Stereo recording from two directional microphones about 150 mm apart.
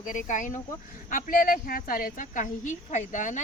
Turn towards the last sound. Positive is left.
turn(degrees=55)  # may be behind; listen again after turning